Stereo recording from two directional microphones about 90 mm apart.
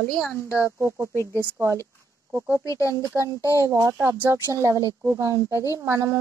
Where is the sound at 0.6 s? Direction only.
30° right (ahead or behind).